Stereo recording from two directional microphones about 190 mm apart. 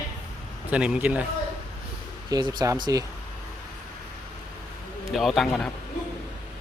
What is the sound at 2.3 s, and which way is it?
Speech, 20° right (ahead or behind).